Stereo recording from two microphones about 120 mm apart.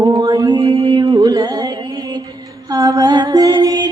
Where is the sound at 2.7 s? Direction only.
30° right (ahead or behind).